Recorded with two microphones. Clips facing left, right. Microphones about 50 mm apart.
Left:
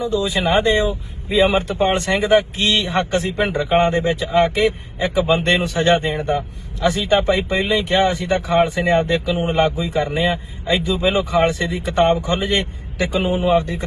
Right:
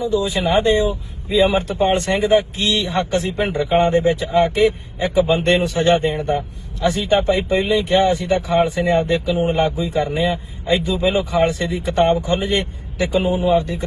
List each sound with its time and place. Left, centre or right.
0.0 s speech: left